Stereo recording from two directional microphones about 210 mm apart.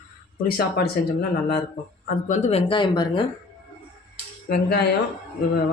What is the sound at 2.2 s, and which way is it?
Speech, 35° left (ahead or behind).